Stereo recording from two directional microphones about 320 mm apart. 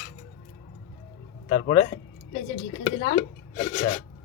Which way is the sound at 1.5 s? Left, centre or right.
Centre.